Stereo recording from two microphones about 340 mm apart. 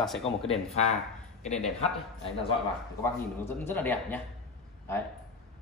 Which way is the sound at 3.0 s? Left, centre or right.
Centre.